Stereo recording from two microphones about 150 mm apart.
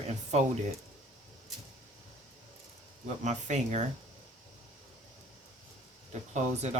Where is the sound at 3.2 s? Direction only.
50° right (ahead or behind).